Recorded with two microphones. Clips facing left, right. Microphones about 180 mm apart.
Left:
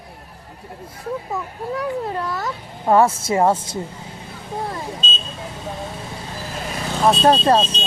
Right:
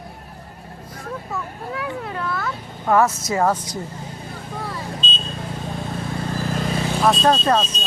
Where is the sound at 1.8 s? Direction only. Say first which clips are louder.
Left 4 dB; 35° left (ahead or behind).